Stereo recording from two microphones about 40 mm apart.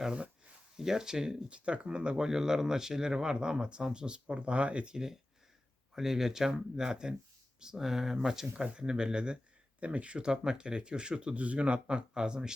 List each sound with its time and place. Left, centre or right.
0.1 s a sound: right
0.8 s speech: centre
1.5 s speech: right
2.2 s speech: centre; by 4.9 s right
5.9 s speech: centre; by 10.2 s right
10.4 s speech: centre
11.3 s speech: right; by 12.5 s centre